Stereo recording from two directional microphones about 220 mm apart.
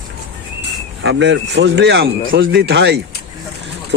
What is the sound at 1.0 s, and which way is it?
A man's voice, 55° right (ahead or behind).